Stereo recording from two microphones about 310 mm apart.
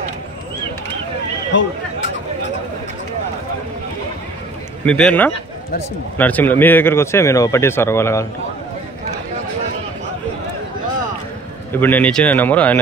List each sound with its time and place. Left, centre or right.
1.5 s speech: left
4.8 s speech: centre
11.8 s speech: centre